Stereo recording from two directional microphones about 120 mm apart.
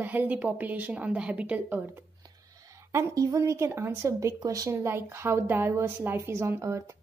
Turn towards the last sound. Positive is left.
turn(degrees=-25)  # may be behind; listen again after turning